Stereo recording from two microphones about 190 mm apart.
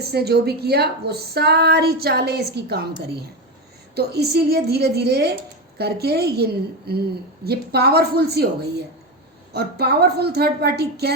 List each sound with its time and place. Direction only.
0.1 s a woman's voice: 60° right (ahead or behind)
3.9 s a woman's voice: 55° right (ahead or behind)
9.5 s a woman's voice: 60° right (ahead or behind)